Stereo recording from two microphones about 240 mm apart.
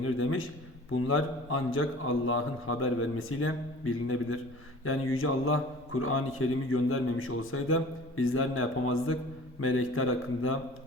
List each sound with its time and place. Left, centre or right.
0.0 s a man's voice: left